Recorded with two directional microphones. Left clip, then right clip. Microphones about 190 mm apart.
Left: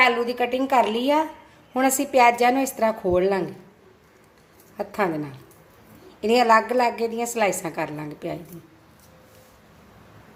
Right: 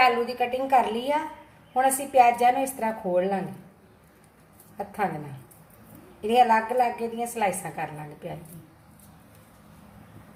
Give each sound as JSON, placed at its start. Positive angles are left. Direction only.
{"t": 0.0, "sound": "a woman's voice", "side_deg": 55}
{"t": 6.2, "sound": "a woman's voice", "side_deg": 50}